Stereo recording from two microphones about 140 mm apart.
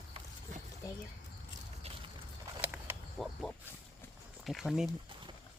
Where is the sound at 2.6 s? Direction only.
15° right (ahead or behind).